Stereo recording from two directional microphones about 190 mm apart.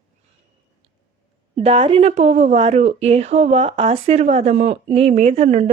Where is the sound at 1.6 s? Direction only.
30° right (ahead or behind).